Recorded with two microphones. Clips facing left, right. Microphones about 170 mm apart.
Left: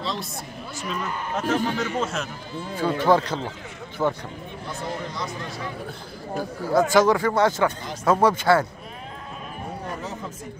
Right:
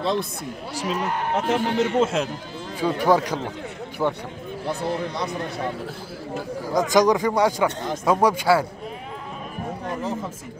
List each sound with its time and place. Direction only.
0.0 s speech: 55° right (ahead or behind)
0.8 s speech: 75° right (ahead or behind)
2.7 s a man's voice: 10° right (ahead or behind)
4.0 s speech: 5° left (ahead or behind)
4.6 s speech: 65° right (ahead or behind)
6.6 s a man's voice: 15° right (ahead or behind)